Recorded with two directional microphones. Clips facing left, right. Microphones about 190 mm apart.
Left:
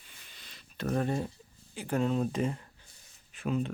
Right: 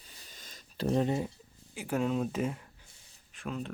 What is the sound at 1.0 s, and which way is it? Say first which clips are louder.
Speech: even; 15° right (ahead or behind).